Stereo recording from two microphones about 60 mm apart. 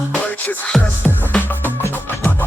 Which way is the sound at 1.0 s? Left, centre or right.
Left.